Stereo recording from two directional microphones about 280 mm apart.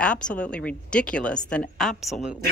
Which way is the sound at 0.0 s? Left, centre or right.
Centre.